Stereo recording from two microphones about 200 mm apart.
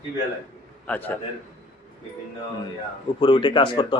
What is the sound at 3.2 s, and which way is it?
Speech, 25° left (ahead or behind).